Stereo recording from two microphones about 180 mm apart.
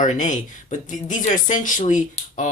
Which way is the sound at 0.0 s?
45° left (ahead or behind).